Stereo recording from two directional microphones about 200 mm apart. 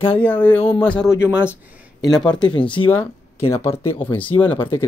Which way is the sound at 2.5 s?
25° left (ahead or behind).